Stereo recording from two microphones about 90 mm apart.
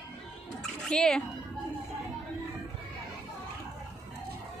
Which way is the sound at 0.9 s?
10° left (ahead or behind).